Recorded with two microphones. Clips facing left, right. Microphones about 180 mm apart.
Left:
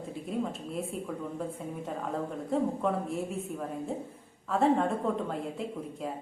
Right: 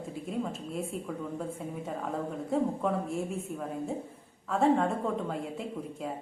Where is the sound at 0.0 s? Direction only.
Centre (ahead or behind).